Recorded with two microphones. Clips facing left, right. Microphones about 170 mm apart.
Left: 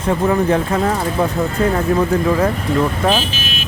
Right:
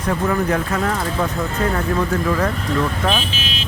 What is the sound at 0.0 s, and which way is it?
Speech, 25° left (ahead or behind).